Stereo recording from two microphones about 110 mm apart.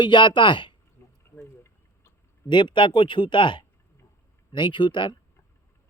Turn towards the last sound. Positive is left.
turn(degrees=50)  # may be behind; listen again after turning